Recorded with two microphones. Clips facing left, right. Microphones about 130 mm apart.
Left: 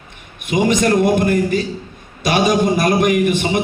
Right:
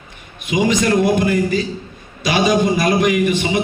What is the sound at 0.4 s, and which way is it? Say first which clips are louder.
A man's voice: left 1 dB; 50° left (ahead or behind).